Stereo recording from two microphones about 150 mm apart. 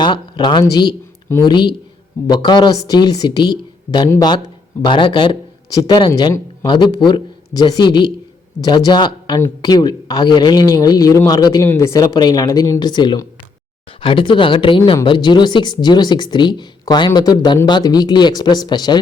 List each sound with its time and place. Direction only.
0.0 s speech: 30° left (ahead or behind)